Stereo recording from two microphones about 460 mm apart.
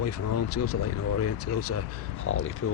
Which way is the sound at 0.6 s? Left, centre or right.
Centre.